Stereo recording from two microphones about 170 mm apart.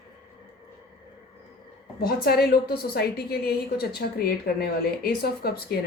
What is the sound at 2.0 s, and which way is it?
A woman's voice, 65° left (ahead or behind).